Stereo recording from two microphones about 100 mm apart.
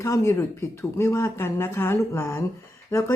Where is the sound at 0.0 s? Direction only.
30° left (ahead or behind).